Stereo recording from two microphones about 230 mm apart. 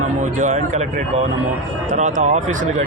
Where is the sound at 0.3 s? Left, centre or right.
Right.